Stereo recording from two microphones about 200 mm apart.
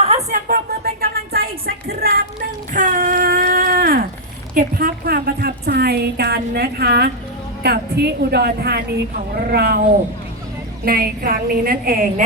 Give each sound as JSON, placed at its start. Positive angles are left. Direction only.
{"t": 0.3, "sound": "speech", "side_deg": -40}
{"t": 1.0, "sound": "a sound", "side_deg": -50}
{"t": 4.5, "sound": "a woman's voice", "side_deg": -45}
{"t": 10.8, "sound": "a woman's voice", "side_deg": -50}